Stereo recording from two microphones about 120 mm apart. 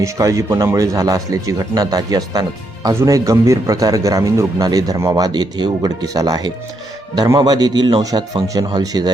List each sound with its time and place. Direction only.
0.0 s a man's voice: 25° right (ahead or behind)